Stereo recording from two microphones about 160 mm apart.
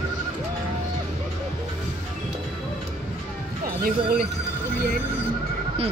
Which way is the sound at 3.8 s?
70° right (ahead or behind).